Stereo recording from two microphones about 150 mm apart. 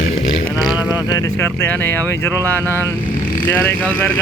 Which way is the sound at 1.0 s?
25° left (ahead or behind).